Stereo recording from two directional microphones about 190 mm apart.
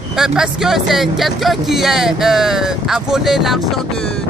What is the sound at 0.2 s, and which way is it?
Speech, centre (ahead or behind).